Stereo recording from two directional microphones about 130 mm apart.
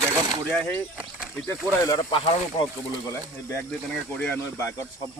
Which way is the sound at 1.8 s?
30° left (ahead or behind).